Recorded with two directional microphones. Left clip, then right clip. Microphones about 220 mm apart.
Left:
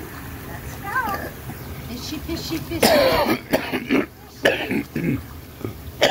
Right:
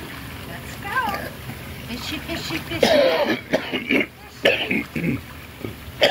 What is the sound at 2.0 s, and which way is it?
Speech, centre (ahead or behind).